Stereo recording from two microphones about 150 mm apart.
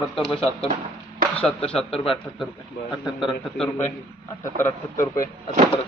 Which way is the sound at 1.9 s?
40° left (ahead or behind).